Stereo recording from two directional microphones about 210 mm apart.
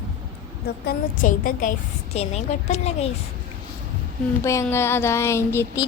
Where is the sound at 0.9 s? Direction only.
40° left (ahead or behind).